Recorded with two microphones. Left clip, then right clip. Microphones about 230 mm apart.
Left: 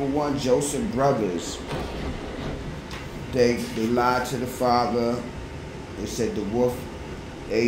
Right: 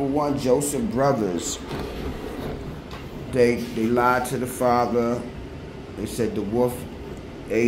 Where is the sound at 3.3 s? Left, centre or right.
Centre.